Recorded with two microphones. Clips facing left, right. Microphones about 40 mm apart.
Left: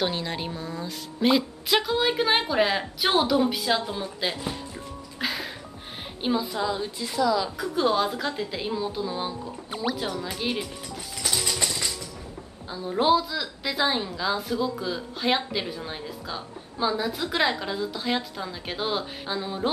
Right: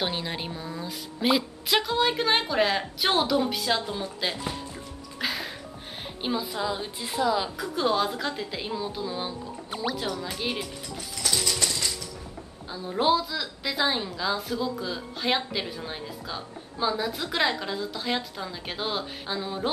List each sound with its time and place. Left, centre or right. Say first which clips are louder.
0.0 s a woman's voice: left 2 dB; centre
6.8 s a woman's voice: left 2 dB; right
7.5 s a woman's voice: left 2 dB; centre
11.4 s a sound: even; centre
12.6 s a woman's voice: left 2 dB; centre